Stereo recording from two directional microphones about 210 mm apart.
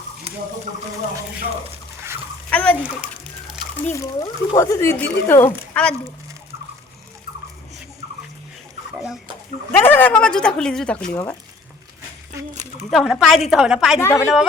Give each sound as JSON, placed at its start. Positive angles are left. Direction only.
{"t": 0.3, "sound": "a sound", "side_deg": -30}
{"t": 2.5, "sound": "bathtub", "side_deg": 5}
{"t": 2.8, "sound": "a sound", "side_deg": -5}
{"t": 3.9, "sound": "speech", "side_deg": 15}
{"t": 9.7, "sound": "speech", "side_deg": 10}
{"t": 12.9, "sound": "speech", "side_deg": 0}
{"t": 14.0, "sound": "speech", "side_deg": 10}